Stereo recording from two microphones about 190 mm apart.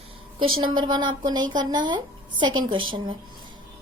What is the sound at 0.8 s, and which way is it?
A woman's voice, 25° right (ahead or behind).